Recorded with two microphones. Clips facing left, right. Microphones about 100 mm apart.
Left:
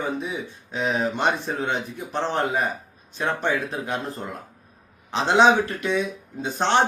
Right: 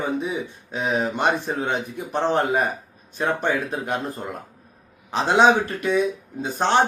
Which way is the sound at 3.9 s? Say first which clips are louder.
Right 2 dB; 15° right (ahead or behind).